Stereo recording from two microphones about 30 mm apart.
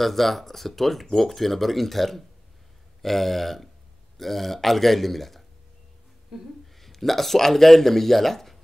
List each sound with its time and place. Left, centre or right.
0.0 s a man's voice: centre
6.3 s a sound: centre
6.7 s speech: centre